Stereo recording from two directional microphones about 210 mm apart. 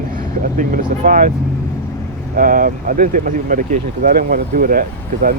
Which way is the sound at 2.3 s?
40° right (ahead or behind).